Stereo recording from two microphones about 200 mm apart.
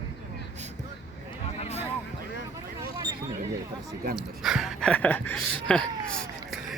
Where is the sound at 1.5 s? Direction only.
30° left (ahead or behind).